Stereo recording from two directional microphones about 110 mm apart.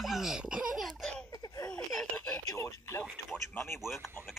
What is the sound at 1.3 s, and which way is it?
Baby laughter, 35° left (ahead or behind).